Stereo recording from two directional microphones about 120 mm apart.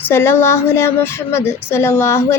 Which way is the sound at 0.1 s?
20° left (ahead or behind).